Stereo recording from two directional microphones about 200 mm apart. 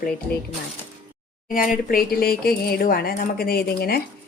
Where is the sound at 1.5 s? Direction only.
45° left (ahead or behind).